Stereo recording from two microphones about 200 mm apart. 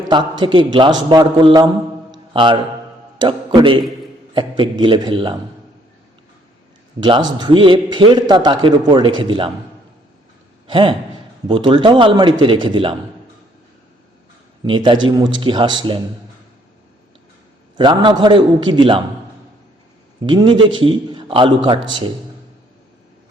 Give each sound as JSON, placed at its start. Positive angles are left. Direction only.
{"t": 0.1, "sound": "a man's voice", "side_deg": -25}
{"t": 7.3, "sound": "a man's voice", "side_deg": -25}
{"t": 10.7, "sound": "a man's voice", "side_deg": -25}
{"t": 14.6, "sound": "a man's voice", "side_deg": -20}
{"t": 17.7, "sound": "a man's voice", "side_deg": -25}
{"t": 20.2, "sound": "a man's voice", "side_deg": -25}